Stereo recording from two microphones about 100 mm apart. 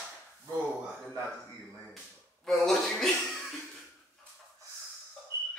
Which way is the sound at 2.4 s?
5° left (ahead or behind).